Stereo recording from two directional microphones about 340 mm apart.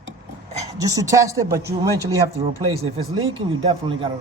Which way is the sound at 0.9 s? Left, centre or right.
Centre.